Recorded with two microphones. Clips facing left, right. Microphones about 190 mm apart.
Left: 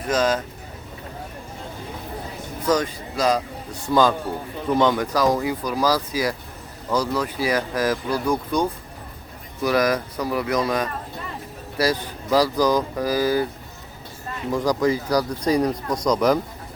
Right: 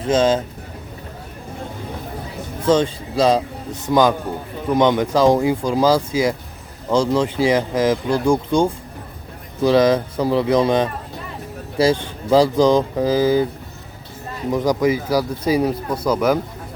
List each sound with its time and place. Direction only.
0.0 s speech: 25° right (ahead or behind)
2.6 s speech: 30° right (ahead or behind)
14.5 s speech: 20° right (ahead or behind)
14.8 s speech: 5° right (ahead or behind)